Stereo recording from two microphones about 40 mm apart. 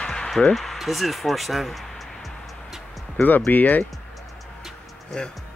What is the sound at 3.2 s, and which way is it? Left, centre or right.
Speech, left.